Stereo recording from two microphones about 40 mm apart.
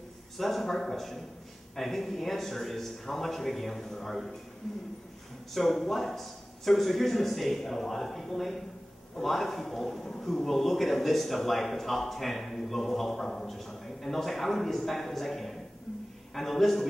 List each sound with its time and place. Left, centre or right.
0.4 s a man's voice: centre
5.5 s a man's voice: centre